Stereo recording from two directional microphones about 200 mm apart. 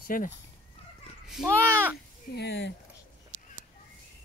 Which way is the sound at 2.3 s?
55° left (ahead or behind).